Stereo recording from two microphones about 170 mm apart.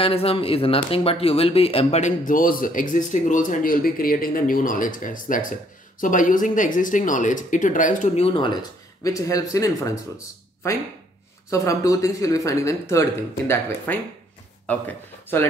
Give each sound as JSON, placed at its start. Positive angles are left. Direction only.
{"t": 0.0, "sound": "speech", "side_deg": 35}
{"t": 8.3, "sound": "a man's voice", "side_deg": 30}